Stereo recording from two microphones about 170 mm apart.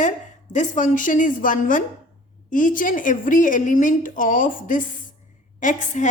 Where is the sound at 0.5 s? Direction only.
45° left (ahead or behind).